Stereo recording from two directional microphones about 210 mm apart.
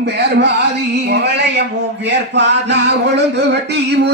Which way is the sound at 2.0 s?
55° right (ahead or behind).